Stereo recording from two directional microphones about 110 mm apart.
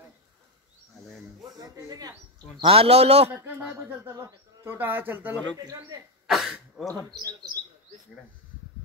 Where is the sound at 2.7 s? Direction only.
65° right (ahead or behind).